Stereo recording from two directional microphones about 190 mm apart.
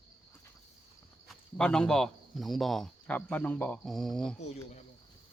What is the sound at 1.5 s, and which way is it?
Speech, 5° left (ahead or behind).